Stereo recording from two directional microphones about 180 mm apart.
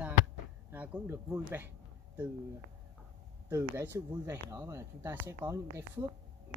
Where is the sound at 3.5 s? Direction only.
15° right (ahead or behind).